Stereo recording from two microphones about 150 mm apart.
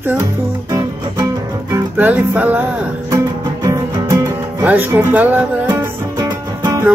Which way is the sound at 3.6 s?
20° right (ahead or behind).